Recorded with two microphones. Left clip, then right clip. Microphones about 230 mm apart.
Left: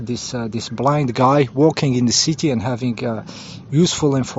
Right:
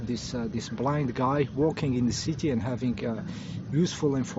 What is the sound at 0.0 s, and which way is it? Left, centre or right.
Speech, left.